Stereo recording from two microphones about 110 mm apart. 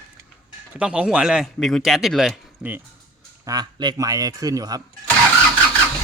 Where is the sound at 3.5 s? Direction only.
40° right (ahead or behind).